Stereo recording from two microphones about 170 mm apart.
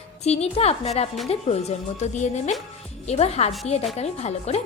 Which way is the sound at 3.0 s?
40° left (ahead or behind).